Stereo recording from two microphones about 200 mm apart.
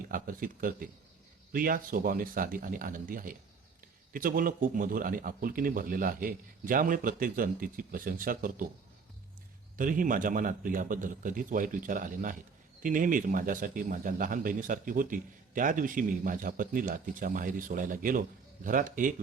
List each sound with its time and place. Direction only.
0.1 s a man's voice: 45° right (ahead or behind)
9.7 s a man's voice: 40° right (ahead or behind)